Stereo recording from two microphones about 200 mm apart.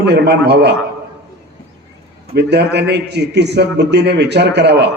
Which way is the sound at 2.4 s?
55° right (ahead or behind).